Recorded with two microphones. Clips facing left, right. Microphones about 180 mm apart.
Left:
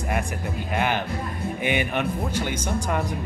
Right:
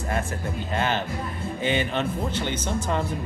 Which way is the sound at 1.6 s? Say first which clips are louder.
Even; 15° left (ahead or behind).